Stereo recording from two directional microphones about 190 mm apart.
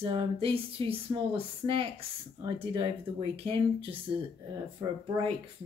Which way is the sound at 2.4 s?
25° right (ahead or behind).